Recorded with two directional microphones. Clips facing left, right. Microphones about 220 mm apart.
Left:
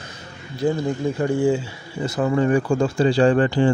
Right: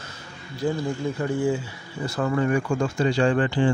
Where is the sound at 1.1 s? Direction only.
25° left (ahead or behind).